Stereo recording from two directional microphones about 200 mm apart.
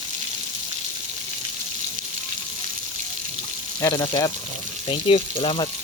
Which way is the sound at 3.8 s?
20° left (ahead or behind).